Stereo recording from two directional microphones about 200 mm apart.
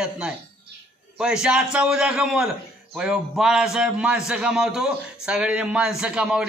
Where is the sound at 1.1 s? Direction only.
5° right (ahead or behind).